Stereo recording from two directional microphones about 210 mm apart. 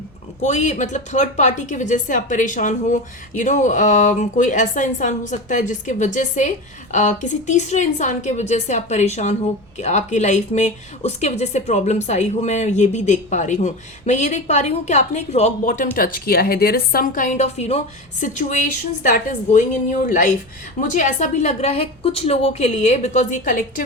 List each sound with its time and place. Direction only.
0.4 s speech: 35° left (ahead or behind)